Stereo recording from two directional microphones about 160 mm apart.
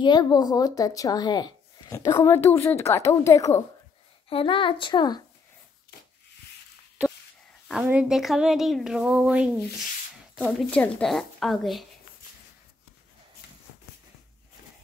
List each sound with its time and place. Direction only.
0.0 s speech: 25° left (ahead or behind)
2.1 s a woman's voice: 15° left (ahead or behind)
4.3 s speech: 35° left (ahead or behind)
7.8 s speech: 5° right (ahead or behind)
10.3 s speech: 5° left (ahead or behind)